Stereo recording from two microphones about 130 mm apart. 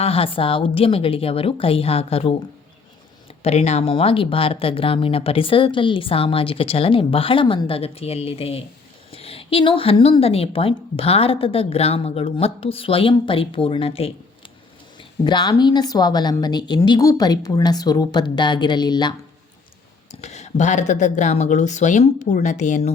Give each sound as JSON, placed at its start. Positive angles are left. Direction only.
{"t": 0.0, "sound": "speech", "side_deg": 45}
{"t": 3.4, "sound": "speech", "side_deg": 55}
{"t": 15.2, "sound": "a woman's voice", "side_deg": 35}
{"t": 20.1, "sound": "speech", "side_deg": 60}